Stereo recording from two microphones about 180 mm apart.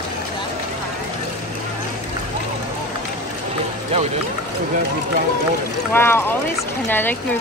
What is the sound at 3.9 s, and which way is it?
Speech, 30° right (ahead or behind).